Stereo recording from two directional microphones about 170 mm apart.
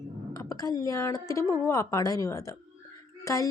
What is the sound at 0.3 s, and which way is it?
Speech, 20° left (ahead or behind).